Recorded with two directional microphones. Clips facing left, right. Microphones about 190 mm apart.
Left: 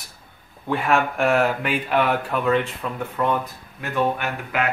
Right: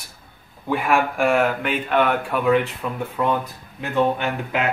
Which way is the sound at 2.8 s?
10° right (ahead or behind).